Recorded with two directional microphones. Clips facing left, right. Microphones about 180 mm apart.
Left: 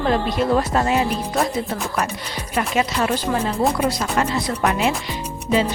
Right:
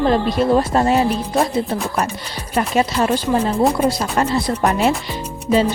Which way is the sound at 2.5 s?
35° right (ahead or behind).